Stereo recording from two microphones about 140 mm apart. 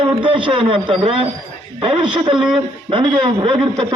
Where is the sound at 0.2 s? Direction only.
35° right (ahead or behind).